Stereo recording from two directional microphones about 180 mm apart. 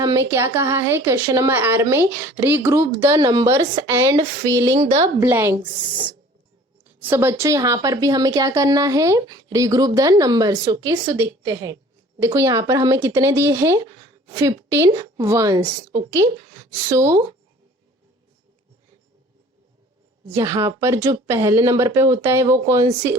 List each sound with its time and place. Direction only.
0.0 s a woman's voice: 15° right (ahead or behind)
5.2 s a woman's voice: 10° right (ahead or behind)
7.0 s a woman's voice: 10° right (ahead or behind)
20.3 s a woman's voice: 15° right (ahead or behind)